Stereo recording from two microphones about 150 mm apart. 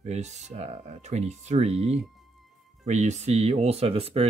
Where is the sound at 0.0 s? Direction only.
50° right (ahead or behind).